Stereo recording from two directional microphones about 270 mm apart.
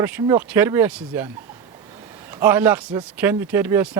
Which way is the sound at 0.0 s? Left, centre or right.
Centre.